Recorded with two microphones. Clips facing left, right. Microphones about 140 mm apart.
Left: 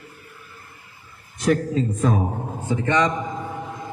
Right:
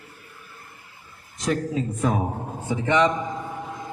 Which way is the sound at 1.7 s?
10° right (ahead or behind).